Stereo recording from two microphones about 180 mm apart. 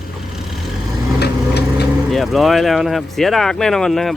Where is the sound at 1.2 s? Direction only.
65° left (ahead or behind).